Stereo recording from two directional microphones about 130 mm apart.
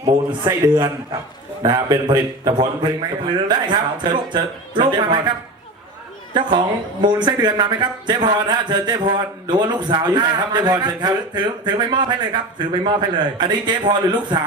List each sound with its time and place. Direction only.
0.0 s a man's voice: 30° right (ahead or behind)
6.3 s a man's voice: 35° right (ahead or behind)